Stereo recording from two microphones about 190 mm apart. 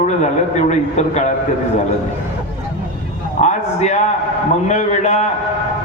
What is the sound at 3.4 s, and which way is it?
A man's voice, 40° left (ahead or behind).